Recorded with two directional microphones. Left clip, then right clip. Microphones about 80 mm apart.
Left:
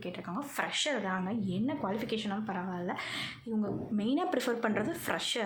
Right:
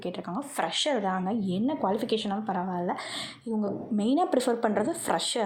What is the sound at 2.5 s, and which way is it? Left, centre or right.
Speech, right.